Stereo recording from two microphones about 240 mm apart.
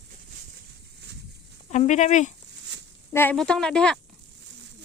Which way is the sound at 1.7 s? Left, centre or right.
Left.